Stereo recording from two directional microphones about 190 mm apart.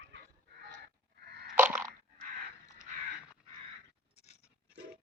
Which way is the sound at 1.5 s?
10° right (ahead or behind).